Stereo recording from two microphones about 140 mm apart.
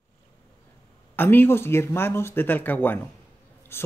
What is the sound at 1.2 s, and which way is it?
Speech, 15° left (ahead or behind).